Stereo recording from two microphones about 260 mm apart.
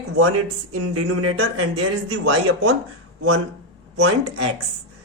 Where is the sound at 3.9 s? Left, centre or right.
Right.